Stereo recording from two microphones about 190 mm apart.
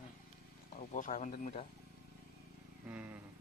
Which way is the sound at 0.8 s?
40° left (ahead or behind).